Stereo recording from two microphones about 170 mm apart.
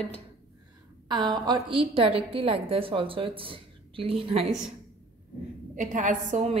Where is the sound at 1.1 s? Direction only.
25° right (ahead or behind).